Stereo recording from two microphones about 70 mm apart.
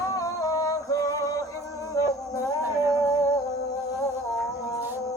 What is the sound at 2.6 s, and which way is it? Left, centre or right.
Music, right.